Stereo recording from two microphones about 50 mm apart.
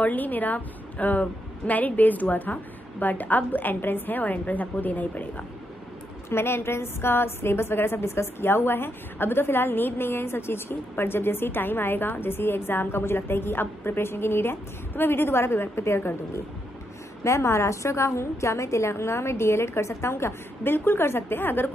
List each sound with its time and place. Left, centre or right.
0.0 s a woman's voice: left
6.3 s a woman's voice: left
17.2 s a woman's voice: left